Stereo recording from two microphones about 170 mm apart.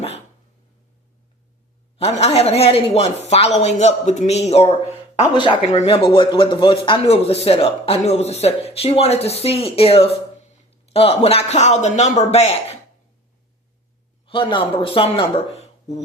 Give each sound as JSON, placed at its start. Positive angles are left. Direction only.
{"t": 2.0, "sound": "speech", "side_deg": 40}
{"t": 5.3, "sound": "speech", "side_deg": 25}
{"t": 14.3, "sound": "speech", "side_deg": 30}